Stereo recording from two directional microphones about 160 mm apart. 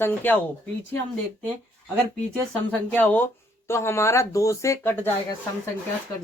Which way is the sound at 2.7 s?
10° left (ahead or behind).